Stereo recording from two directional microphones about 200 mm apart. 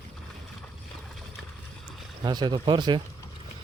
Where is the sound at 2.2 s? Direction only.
20° right (ahead or behind).